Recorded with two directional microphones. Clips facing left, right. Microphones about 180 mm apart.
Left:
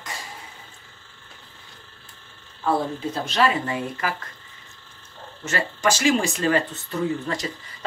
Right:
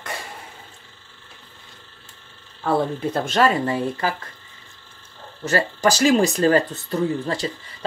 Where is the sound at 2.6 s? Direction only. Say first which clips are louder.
Right 2 dB; 55° right (ahead or behind); by 4.1 s 35° right (ahead or behind).